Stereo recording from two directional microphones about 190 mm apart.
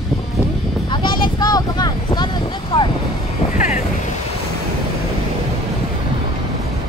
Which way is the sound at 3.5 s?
40° left (ahead or behind).